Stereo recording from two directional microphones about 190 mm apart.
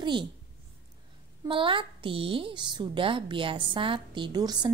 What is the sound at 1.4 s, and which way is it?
A woman's voice, 25° right (ahead or behind).